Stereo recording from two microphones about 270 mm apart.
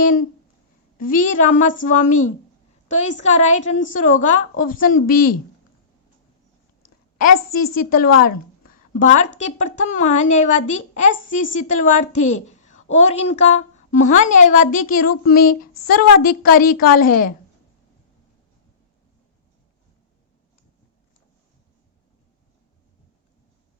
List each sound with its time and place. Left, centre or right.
0.0 s a woman's voice: left
7.2 s a woman's voice: left